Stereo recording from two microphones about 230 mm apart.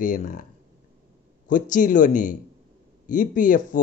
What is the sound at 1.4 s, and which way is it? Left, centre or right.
Speech, left.